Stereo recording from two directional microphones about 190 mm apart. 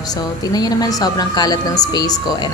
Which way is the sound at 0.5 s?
20° left (ahead or behind).